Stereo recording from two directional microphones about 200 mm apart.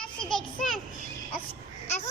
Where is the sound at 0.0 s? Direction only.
5° left (ahead or behind).